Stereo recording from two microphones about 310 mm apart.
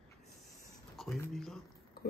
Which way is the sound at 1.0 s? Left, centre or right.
Centre.